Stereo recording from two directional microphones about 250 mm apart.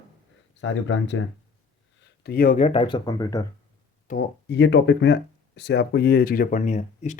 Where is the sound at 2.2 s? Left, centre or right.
Left; by 3.5 s centre.